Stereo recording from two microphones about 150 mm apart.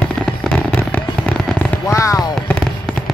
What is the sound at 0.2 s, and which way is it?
Fireworks, 5° left (ahead or behind).